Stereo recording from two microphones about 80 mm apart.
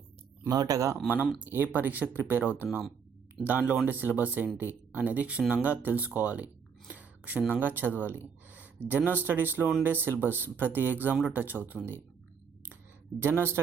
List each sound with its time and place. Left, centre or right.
0.4 s speech: right
1.0 s speech: centre
13.1 s speech: right